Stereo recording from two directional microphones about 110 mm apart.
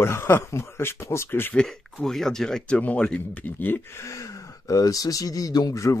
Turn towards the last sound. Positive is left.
turn(degrees=30)  # may be behind; listen again after turning